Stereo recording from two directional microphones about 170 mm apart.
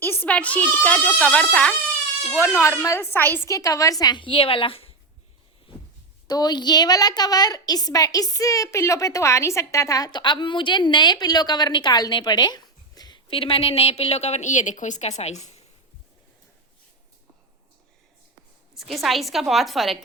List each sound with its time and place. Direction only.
0.0 s a woman's voice: 10° left (ahead or behind); by 4.9 s 35° left (ahead or behind)
6.2 s a woman's voice: 25° left (ahead or behind); by 15.6 s 40° left (ahead or behind)
18.8 s a woman's voice: centre (ahead or behind)